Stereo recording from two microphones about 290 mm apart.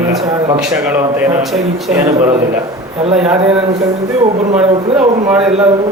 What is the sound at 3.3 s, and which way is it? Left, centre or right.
Speech, centre.